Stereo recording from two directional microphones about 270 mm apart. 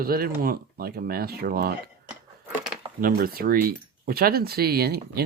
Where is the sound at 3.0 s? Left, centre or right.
Right.